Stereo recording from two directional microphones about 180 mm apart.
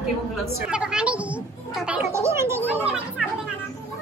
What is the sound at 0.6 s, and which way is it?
A woman's voice, 5° right (ahead or behind).